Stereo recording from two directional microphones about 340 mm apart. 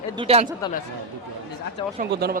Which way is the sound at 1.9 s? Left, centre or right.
Right.